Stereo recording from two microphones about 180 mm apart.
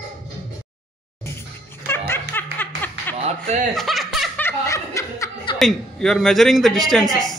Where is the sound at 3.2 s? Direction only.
40° right (ahead or behind).